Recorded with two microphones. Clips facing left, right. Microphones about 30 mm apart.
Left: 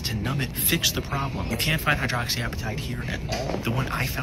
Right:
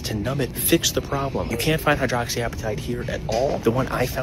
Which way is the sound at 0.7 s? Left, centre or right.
Centre.